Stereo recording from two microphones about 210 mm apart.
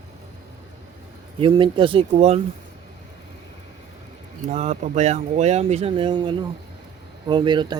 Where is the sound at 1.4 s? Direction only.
20° right (ahead or behind).